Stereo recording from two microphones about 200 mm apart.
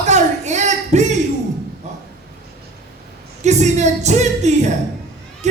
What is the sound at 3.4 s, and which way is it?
Music, 35° right (ahead or behind).